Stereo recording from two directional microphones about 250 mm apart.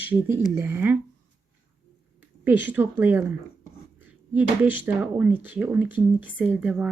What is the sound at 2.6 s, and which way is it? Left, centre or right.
Speech, centre.